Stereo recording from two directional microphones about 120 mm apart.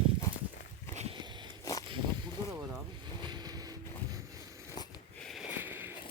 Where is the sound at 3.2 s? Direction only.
40° right (ahead or behind).